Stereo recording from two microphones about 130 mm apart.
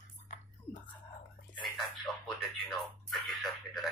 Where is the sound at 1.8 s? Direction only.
Centre (ahead or behind).